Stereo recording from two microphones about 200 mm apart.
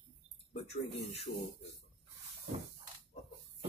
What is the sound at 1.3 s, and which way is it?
Speech, 55° left (ahead or behind).